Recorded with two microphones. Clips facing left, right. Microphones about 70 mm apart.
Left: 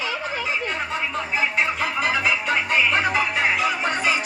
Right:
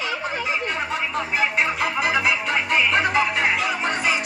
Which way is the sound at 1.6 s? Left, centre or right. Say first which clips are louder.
Right 1 dB; centre.